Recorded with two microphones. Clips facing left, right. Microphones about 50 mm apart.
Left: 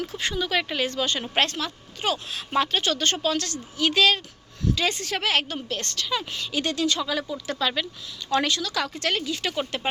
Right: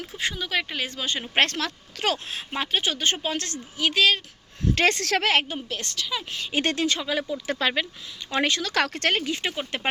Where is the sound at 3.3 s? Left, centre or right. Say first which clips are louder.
Left 2 dB; right.